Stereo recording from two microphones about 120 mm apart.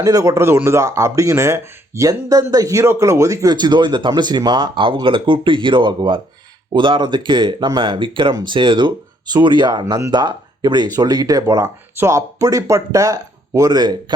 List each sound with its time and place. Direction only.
0.0 s speech: 30° right (ahead or behind)